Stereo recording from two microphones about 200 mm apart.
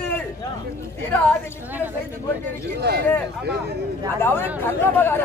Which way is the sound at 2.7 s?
55° right (ahead or behind).